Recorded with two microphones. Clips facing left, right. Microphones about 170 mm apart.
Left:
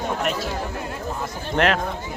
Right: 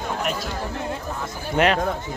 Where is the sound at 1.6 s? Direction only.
5° right (ahead or behind).